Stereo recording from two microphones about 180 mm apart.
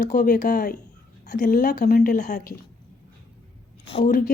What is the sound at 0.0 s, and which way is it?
A woman's voice, 45° left (ahead or behind).